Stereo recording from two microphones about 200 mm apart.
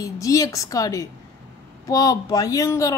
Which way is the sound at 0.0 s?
15° left (ahead or behind).